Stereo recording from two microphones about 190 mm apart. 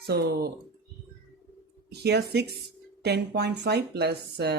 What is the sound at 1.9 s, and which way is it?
Speech, 60° right (ahead or behind).